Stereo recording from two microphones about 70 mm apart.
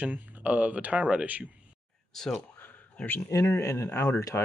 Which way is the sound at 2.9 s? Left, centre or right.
Left.